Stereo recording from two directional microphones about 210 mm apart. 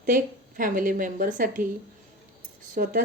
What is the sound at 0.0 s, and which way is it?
A woman's voice, 40° right (ahead or behind).